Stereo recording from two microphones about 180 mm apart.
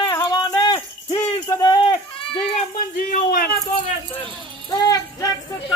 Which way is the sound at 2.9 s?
50° left (ahead or behind).